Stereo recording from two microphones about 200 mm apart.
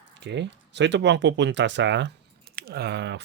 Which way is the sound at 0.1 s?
60° right (ahead or behind).